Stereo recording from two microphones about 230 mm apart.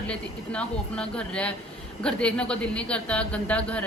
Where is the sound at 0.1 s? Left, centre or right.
Centre.